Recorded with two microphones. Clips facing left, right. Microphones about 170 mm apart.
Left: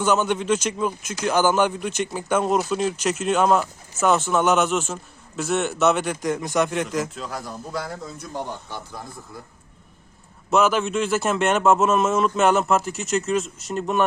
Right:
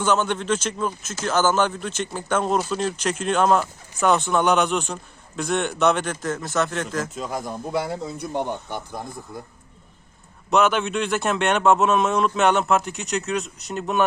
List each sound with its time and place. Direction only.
0.0 s a man's voice: 10° left (ahead or behind)
7.3 s speech: 20° right (ahead or behind)
10.5 s a man's voice: centre (ahead or behind)